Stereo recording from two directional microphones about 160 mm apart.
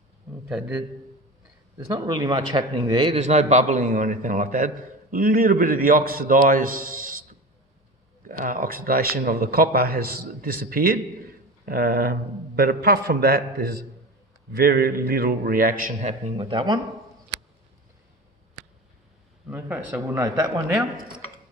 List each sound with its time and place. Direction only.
0.4 s a man's voice: 5° right (ahead or behind)
1.9 s speech: 25° right (ahead or behind)
3.2 s a man's voice: 45° right (ahead or behind)
8.3 s a man's voice: 65° right (ahead or behind)
15.9 s a man's voice: 45° right (ahead or behind)
16.5 s speech: 30° right (ahead or behind)
19.5 s a man's voice: 10° right (ahead or behind)